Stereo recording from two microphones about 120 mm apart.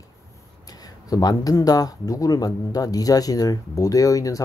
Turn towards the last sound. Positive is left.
turn(degrees=30)  # may be behind; listen again after turning